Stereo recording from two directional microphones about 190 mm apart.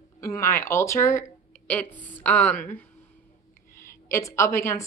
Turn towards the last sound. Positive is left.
turn(degrees=15)  # may be behind; listen again after turning